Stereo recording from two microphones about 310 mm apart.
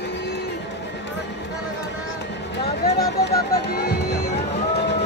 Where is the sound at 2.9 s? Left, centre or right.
Left.